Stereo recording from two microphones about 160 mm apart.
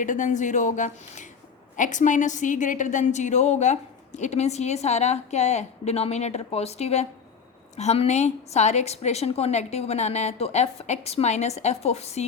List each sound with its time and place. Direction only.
0.0 s a woman's voice: 50° left (ahead or behind)